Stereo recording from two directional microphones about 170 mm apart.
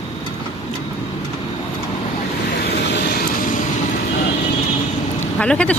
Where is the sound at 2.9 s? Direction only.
60° left (ahead or behind).